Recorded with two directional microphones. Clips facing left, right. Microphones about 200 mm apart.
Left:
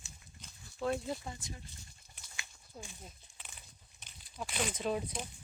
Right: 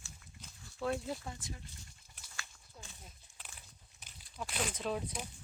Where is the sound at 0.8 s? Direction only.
Centre (ahead or behind).